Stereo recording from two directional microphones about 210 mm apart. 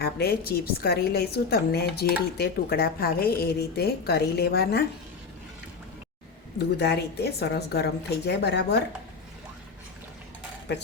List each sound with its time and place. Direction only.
0.0 s a woman's voice: 50° left (ahead or behind)
6.6 s a woman's voice: 55° left (ahead or behind)